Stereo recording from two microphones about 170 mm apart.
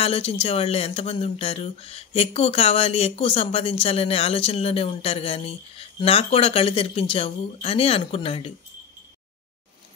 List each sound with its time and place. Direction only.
0.0 s speech: 35° left (ahead or behind)